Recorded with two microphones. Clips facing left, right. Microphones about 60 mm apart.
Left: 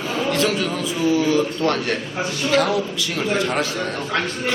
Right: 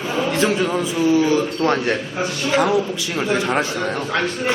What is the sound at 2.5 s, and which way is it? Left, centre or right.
Speech, right.